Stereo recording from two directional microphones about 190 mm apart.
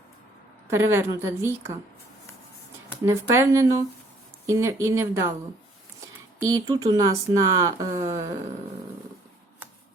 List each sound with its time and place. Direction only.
0.7 s speech: 15° right (ahead or behind)
3.1 s speech: 15° right (ahead or behind)
6.4 s speech: 20° right (ahead or behind)